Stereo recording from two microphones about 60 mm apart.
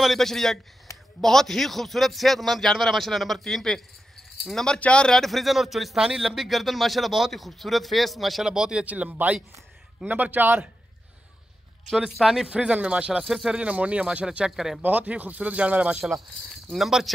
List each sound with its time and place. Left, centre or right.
0.0 s speech: centre
0.9 s a sound: left
1.2 s speech: centre
4.6 s speech: centre
8.5 s speech: centre
8.8 s speech: right
12.2 s speech: centre
12.4 s speech: centre
13.2 s speech: centre
14.8 s speech: right
16.7 s speech: centre